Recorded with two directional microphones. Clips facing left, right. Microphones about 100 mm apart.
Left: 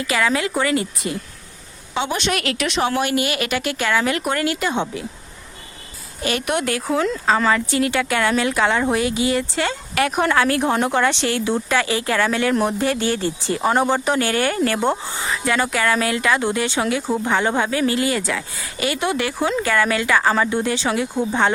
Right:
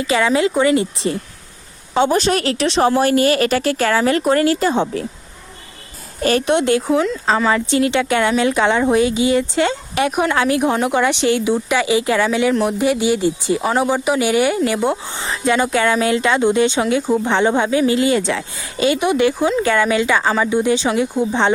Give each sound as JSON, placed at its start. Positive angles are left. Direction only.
{"t": 0.0, "sound": "a woman's voice", "side_deg": -25}
{"t": 1.9, "sound": "a woman's voice", "side_deg": -40}
{"t": 6.4, "sound": "a woman's voice", "side_deg": -25}
{"t": 7.0, "sound": "speech", "side_deg": 0}
{"t": 7.5, "sound": "a woman's voice", "side_deg": -25}
{"t": 13.6, "sound": "speech", "side_deg": -5}
{"t": 15.1, "sound": "a woman's voice", "side_deg": -25}
{"t": 20.2, "sound": "speech", "side_deg": -10}